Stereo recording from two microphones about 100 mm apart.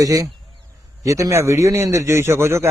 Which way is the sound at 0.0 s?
35° right (ahead or behind).